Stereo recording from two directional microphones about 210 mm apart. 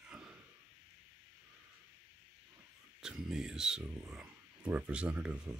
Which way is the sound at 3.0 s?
5° right (ahead or behind).